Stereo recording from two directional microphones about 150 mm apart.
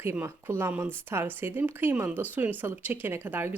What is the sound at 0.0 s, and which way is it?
Speech, 15° right (ahead or behind).